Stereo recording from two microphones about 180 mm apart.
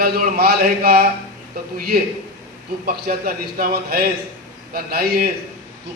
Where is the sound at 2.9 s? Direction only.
55° right (ahead or behind).